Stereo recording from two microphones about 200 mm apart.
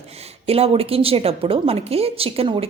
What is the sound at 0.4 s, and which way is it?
A woman's voice, 30° right (ahead or behind).